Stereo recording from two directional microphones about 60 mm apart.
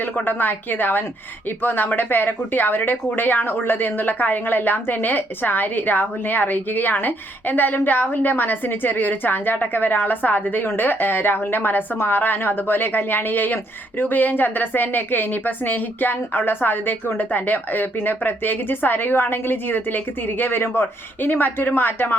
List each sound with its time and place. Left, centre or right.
0.0 s speech: left